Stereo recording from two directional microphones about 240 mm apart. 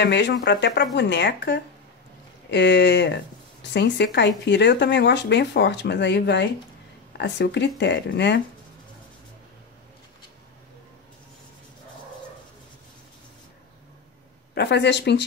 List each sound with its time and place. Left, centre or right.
0.0 s speech: left
14.5 s speech: left